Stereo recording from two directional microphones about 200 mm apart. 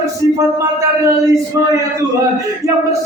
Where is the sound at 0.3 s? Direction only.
15° right (ahead or behind).